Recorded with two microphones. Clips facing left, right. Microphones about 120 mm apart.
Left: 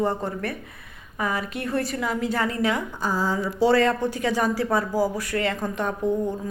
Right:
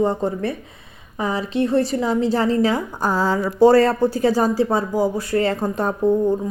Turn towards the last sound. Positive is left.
turn(degrees=-35)  # may be behind; listen again after turning